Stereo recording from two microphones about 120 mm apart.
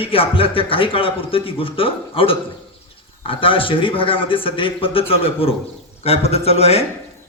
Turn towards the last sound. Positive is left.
turn(degrees=60)  # may be behind; listen again after turning